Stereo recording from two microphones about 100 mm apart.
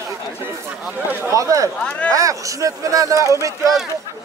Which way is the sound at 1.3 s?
35° right (ahead or behind).